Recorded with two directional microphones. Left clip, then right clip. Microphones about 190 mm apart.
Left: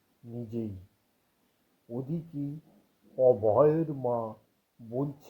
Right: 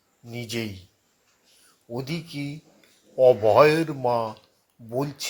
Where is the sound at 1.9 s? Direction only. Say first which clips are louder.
Right 5 dB; 40° right (ahead or behind).